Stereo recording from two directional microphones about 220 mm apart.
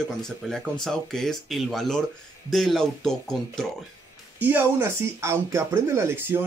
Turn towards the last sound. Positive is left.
turn(degrees=-10)  # may be behind; listen again after turning